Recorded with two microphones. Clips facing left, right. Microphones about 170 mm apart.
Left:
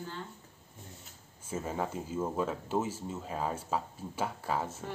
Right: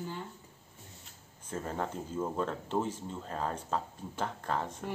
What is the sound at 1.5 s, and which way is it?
Speech, 5° left (ahead or behind).